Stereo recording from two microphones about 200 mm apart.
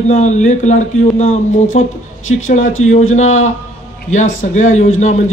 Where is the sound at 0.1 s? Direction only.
40° left (ahead or behind).